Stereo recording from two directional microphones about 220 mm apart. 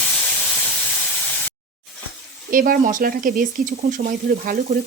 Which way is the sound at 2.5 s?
40° right (ahead or behind).